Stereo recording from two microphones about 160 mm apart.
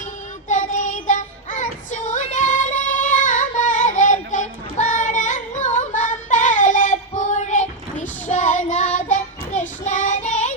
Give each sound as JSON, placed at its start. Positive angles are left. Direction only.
{"t": 0.4, "sound": "child singing", "side_deg": 50}